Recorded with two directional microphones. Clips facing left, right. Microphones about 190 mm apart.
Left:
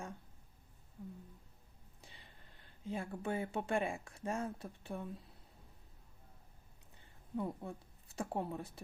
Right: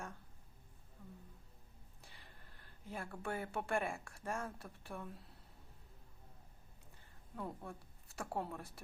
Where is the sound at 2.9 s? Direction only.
20° left (ahead or behind).